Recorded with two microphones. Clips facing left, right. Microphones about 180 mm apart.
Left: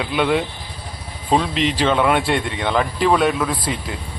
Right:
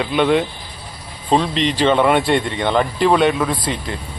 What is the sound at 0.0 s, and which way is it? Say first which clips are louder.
Speech: right 3 dB; centre (ahead or behind).